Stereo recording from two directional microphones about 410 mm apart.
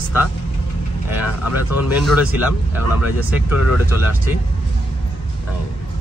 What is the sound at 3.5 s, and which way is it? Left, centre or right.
Speech, left.